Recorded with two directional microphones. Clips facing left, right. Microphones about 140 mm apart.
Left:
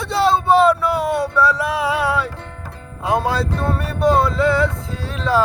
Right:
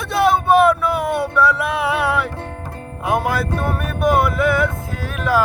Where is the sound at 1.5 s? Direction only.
20° right (ahead or behind).